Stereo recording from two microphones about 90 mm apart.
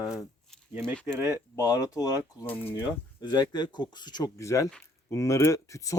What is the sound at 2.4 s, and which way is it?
Speech, 20° left (ahead or behind).